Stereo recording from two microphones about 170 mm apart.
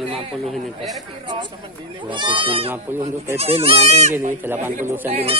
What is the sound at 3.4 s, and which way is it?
Speech, 35° right (ahead or behind).